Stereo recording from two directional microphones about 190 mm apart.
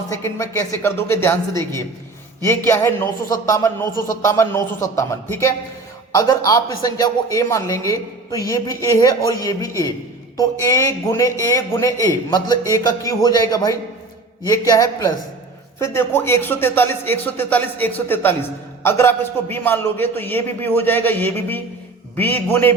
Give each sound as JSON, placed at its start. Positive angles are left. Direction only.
{"t": 0.1, "sound": "a man's voice", "side_deg": 15}